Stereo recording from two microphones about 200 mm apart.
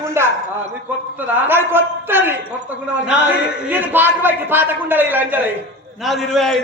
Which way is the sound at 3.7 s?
10° right (ahead or behind).